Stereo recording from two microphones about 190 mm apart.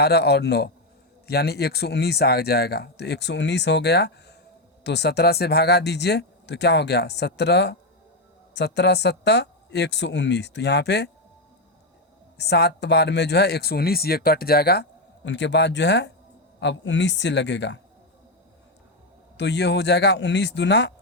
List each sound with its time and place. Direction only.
0.0 s speech: 60° left (ahead or behind)
12.4 s a man's voice: 60° left (ahead or behind)
19.4 s speech: 65° left (ahead or behind)